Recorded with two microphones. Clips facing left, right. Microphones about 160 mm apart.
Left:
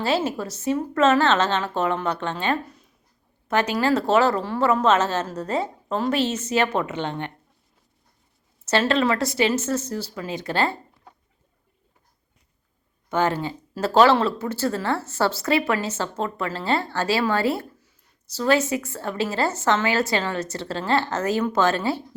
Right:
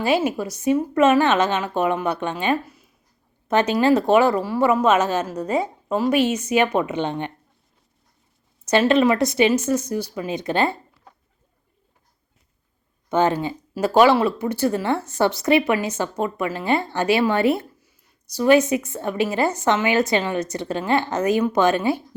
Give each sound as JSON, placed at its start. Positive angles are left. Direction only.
{"t": 0.0, "sound": "speech", "side_deg": -15}
{"t": 3.5, "sound": "speech", "side_deg": -20}
{"t": 8.6, "sound": "speech", "side_deg": -15}
{"t": 13.1, "sound": "speech", "side_deg": -20}